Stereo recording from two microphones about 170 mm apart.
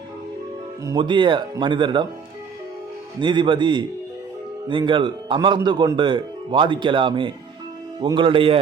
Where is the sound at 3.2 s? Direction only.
30° right (ahead or behind).